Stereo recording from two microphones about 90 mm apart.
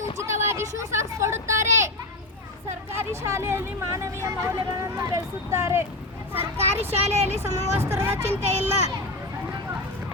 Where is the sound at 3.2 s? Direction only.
30° right (ahead or behind).